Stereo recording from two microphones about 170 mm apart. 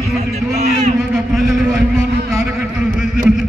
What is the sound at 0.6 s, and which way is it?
Speech, 40° right (ahead or behind).